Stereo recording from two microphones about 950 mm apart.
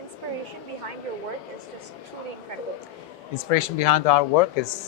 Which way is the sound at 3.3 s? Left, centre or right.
Left.